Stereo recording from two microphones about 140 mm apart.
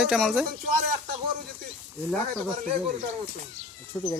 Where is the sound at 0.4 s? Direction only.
90° right.